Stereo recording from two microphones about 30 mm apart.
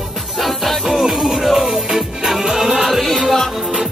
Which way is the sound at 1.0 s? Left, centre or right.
Centre.